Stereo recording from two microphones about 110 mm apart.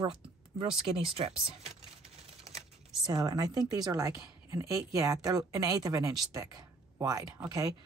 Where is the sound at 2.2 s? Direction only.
75° right (ahead or behind).